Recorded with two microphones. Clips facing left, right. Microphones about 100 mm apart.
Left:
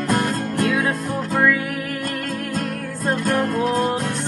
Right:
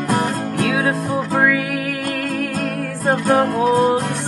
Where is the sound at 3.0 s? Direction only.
55° right (ahead or behind).